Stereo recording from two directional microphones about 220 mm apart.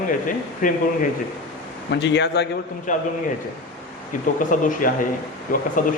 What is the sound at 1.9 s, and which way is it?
Speech, 50° left (ahead or behind).